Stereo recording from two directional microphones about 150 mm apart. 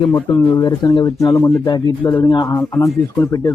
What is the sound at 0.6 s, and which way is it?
Speech, 25° left (ahead or behind).